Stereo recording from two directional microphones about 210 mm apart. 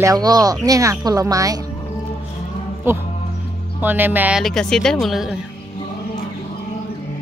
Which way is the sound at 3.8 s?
10° right (ahead or behind).